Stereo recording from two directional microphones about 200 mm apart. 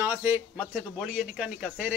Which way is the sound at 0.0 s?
10° right (ahead or behind).